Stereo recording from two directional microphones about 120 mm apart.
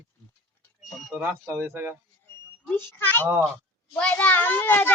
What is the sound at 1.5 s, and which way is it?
Speech, 20° right (ahead or behind).